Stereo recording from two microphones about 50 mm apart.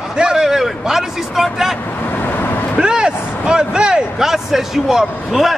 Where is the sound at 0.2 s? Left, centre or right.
Centre.